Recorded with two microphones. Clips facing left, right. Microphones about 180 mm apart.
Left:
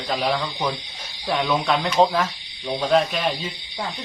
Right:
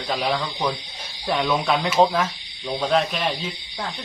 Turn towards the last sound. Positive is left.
turn(degrees=0)  # may be behind; listen again after turning